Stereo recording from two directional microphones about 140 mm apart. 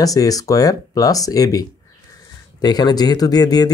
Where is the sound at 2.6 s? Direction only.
30° left (ahead or behind).